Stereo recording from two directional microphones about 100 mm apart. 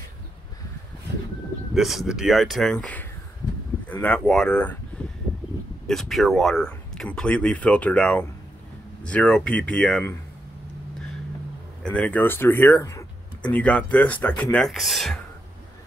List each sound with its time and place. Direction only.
1.7 s speech: centre (ahead or behind)
5.2 s a sound: centre (ahead or behind)
5.9 s speech: centre (ahead or behind)
11.8 s speech: 15° left (ahead or behind)
14.6 s speech: centre (ahead or behind)